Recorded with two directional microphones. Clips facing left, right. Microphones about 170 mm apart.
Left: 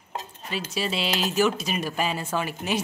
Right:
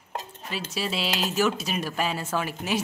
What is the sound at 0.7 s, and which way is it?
Speech, centre (ahead or behind).